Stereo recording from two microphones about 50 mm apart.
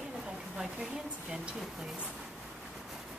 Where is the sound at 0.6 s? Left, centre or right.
Centre.